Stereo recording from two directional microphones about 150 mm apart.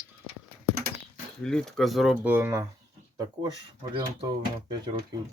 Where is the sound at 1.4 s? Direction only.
5° left (ahead or behind).